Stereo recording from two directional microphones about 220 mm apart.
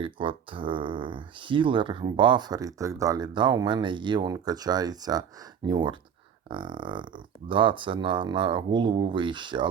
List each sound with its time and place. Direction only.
0.0 s speech: 25° right (ahead or behind)